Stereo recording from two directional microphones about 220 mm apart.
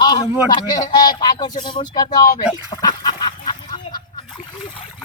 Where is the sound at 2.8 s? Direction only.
20° left (ahead or behind).